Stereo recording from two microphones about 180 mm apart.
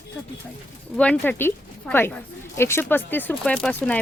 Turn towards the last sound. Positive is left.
turn(degrees=5)  # may be behind; listen again after turning